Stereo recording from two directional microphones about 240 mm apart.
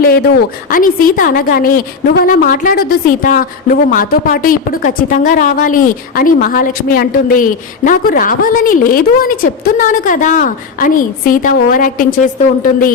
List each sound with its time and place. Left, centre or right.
0.7 s speech: left